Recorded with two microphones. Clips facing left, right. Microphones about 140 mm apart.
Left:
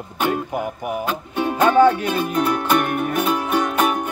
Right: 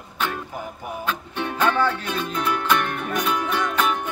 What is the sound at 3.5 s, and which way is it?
Music, 45° left (ahead or behind).